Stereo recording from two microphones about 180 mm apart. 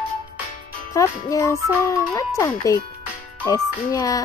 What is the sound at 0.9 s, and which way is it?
Speech, 15° left (ahead or behind).